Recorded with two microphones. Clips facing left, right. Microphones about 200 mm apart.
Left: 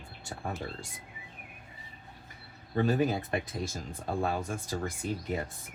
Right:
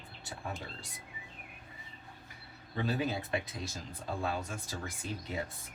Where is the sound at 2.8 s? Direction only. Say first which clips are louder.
Left 6 dB; 50° left (ahead or behind).